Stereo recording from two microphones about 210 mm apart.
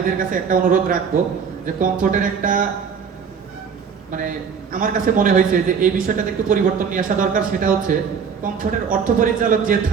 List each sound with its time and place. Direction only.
0.2 s a man's voice: 40° right (ahead or behind)
4.1 s a man's voice: 40° right (ahead or behind)